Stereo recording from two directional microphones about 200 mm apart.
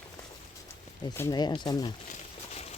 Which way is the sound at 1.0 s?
15° left (ahead or behind).